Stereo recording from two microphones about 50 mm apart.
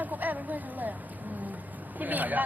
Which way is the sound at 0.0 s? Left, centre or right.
Right.